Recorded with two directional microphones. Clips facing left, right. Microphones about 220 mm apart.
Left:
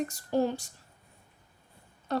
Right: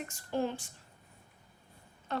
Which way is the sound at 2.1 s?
40° left (ahead or behind).